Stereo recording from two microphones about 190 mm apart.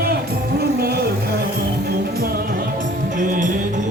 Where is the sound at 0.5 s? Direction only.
55° right (ahead or behind).